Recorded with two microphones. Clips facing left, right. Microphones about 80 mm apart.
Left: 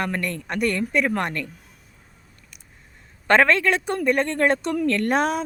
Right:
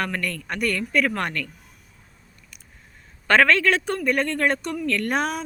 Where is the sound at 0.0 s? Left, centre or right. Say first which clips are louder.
Left 1 dB; left.